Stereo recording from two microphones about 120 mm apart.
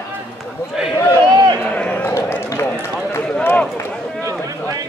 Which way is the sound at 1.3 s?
35° right (ahead or behind).